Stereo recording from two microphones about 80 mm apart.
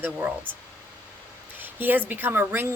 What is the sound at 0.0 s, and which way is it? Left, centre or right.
Speech, right.